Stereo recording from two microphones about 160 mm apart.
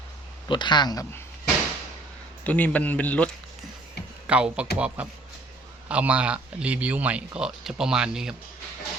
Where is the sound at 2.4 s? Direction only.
10° left (ahead or behind).